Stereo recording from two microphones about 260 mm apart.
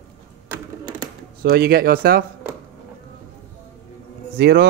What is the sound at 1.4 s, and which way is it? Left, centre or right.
Speech, right.